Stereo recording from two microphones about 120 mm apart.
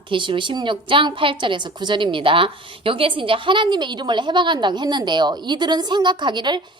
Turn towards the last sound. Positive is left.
turn(degrees=-40)  # may be behind; listen again after turning